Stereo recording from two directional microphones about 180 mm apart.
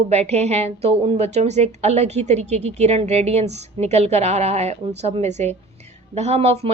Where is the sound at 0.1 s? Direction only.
35° right (ahead or behind).